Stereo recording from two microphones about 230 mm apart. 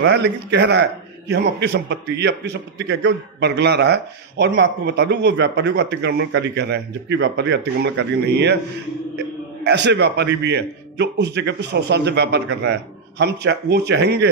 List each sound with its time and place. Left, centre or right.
0.0 s a man's voice: right
9.6 s a man's voice: right